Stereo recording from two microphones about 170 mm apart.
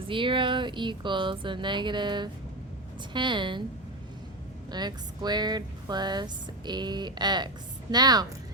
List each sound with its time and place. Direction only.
0.1 s speech: 30° right (ahead or behind)
4.7 s speech: 25° right (ahead or behind)